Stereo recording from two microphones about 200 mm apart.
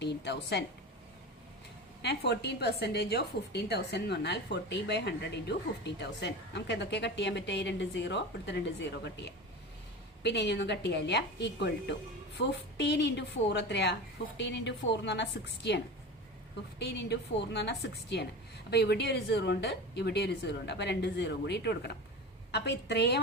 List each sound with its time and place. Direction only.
0.0 s a sound: 55° left (ahead or behind)
2.0 s a woman's voice: 55° left (ahead or behind)
10.2 s a woman's voice: 55° left (ahead or behind)